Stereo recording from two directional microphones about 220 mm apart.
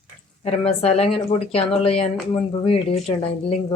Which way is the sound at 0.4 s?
25° left (ahead or behind).